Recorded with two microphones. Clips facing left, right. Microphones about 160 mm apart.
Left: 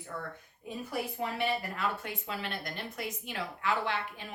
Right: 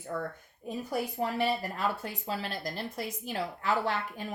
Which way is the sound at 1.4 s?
35° right (ahead or behind).